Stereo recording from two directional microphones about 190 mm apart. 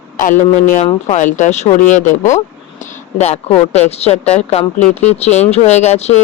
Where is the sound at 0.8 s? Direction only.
40° left (ahead or behind).